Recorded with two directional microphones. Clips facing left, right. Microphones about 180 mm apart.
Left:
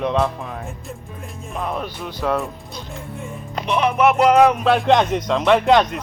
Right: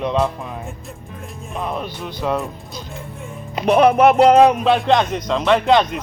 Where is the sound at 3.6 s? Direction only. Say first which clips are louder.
Right 5 dB; 40° right (ahead or behind).